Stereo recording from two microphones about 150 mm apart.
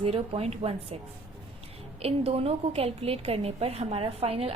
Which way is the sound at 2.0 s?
40° right (ahead or behind).